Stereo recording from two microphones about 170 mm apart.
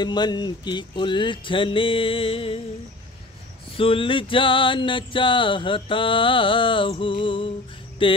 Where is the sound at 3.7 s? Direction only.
30° left (ahead or behind).